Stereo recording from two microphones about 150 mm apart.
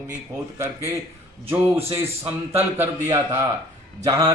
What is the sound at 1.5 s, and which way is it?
A man's voice, 15° right (ahead or behind).